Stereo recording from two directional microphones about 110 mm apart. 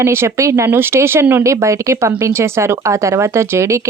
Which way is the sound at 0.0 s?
25° right (ahead or behind).